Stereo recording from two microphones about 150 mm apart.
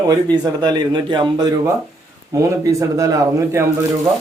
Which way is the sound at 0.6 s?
30° right (ahead or behind).